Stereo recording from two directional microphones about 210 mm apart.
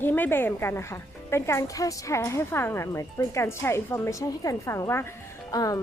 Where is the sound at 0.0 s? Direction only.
10° left (ahead or behind).